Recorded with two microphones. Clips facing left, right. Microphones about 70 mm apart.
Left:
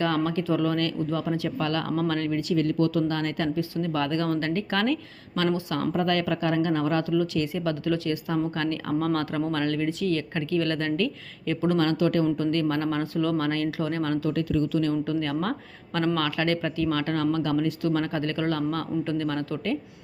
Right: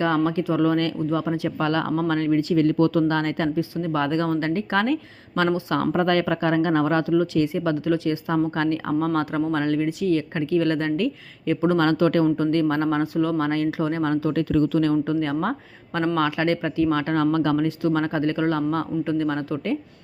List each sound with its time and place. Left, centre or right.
0.0 s speech: right
5.8 s speech: right
11.8 s speech: right
12.4 s speech: right
14.6 s speech: right
15.0 s speech: right